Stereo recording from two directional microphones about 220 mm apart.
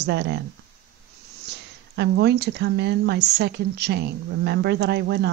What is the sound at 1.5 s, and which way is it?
Speech, 50° right (ahead or behind).